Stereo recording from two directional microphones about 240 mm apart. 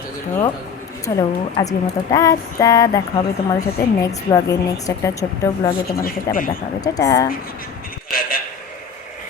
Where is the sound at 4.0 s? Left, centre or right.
Centre.